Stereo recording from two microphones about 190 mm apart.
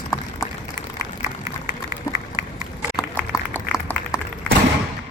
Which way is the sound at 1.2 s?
15° right (ahead or behind).